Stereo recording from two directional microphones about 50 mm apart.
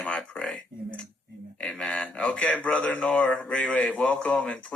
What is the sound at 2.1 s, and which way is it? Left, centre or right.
A man's voice, left.